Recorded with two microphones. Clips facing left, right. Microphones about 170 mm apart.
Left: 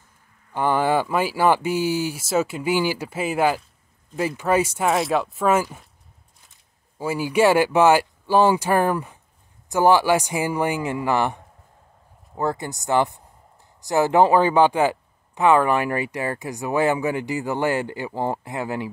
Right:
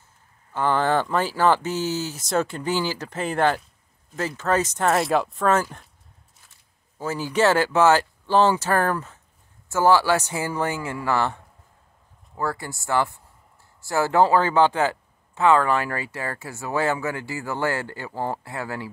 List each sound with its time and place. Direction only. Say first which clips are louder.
0.5 s speech: left 1 dB; 15° left (ahead or behind)
7.0 s speech: left 3 dB; 10° left (ahead or behind)